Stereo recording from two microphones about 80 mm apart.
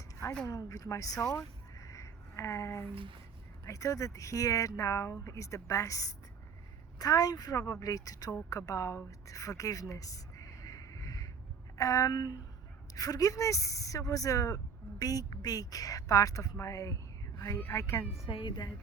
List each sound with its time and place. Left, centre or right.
0.4 s speech: left
9.0 s a sound: left
11.8 s speech: left
17.6 s speech: left
18.3 s a woman's voice: left